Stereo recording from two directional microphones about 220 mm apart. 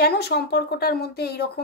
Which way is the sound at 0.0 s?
45° left (ahead or behind).